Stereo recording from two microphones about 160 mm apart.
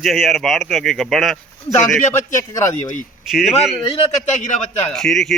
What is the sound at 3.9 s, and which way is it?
Speech, 50° left (ahead or behind).